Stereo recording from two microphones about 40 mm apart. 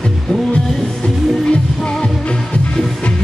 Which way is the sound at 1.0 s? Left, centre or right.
Left.